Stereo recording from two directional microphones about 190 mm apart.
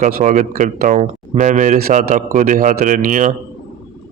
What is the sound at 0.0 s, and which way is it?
A man's voice, 40° right (ahead or behind).